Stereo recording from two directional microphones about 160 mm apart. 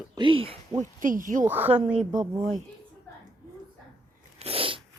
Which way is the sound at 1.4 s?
10° right (ahead or behind).